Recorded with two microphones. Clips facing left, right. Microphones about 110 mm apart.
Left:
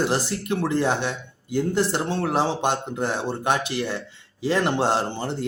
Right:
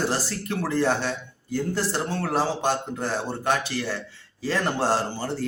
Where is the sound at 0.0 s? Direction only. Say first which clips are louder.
Left 3 dB; 20° left (ahead or behind).